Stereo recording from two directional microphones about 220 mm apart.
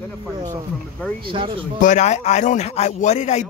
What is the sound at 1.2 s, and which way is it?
Speech, 25° right (ahead or behind).